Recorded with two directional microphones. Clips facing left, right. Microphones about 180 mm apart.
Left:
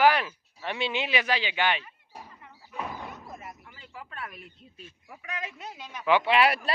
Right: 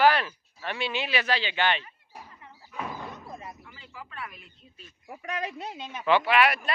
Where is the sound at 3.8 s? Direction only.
45° left (ahead or behind).